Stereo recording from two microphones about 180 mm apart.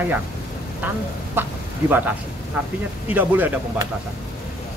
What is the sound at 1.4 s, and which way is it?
Speech, 10° right (ahead or behind).